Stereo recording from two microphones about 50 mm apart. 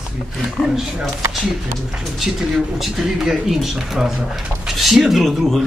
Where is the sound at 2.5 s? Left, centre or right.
Centre.